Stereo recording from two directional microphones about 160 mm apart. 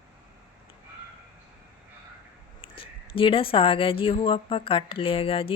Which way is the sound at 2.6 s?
35° left (ahead or behind).